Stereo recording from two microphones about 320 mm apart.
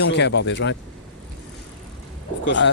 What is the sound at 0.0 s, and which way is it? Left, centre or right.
Speech, left.